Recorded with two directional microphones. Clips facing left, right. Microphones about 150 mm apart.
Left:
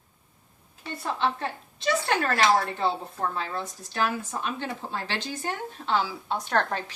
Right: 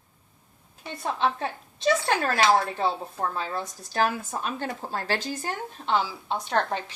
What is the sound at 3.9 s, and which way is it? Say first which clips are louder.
Speech: right 2 dB; 40° right (ahead or behind).